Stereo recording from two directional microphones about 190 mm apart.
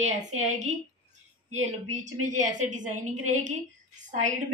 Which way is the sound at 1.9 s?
40° right (ahead or behind).